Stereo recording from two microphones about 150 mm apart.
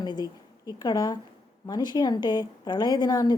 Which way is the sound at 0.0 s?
30° left (ahead or behind).